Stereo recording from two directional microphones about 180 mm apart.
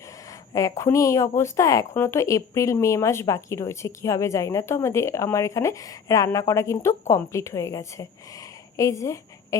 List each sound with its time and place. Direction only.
0.5 s speech: 15° left (ahead or behind)